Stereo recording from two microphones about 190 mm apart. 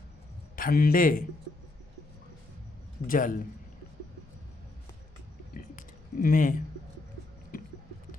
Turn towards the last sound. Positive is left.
turn(degrees=45)  # may be behind; listen again after turning